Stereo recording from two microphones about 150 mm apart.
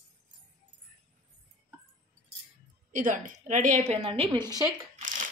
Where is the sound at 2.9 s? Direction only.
60° right (ahead or behind).